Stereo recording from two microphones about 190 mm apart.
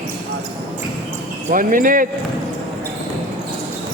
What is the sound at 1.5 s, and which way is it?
Speech, 45° right (ahead or behind).